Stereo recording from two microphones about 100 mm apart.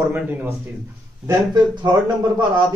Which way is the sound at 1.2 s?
45° right (ahead or behind).